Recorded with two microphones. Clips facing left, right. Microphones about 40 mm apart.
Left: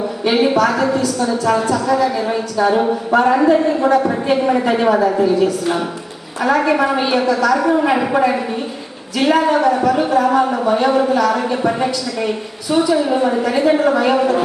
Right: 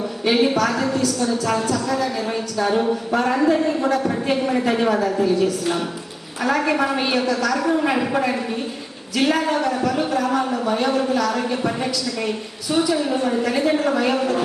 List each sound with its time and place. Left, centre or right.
0.3 s a woman's voice: centre
13.1 s a man's voice: centre